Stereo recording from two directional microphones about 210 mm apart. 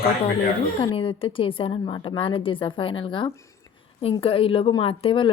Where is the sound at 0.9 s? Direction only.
25° left (ahead or behind).